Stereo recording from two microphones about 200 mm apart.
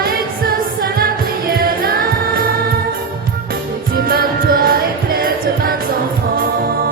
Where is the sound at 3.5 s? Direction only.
45° right (ahead or behind).